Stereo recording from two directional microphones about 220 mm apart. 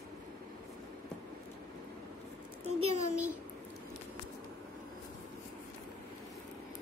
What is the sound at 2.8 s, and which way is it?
Speech, 90° right.